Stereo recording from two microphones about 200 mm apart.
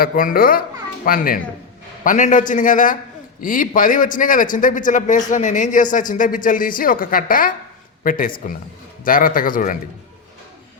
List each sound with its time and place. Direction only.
0.0 s a man's voice: 45° left (ahead or behind)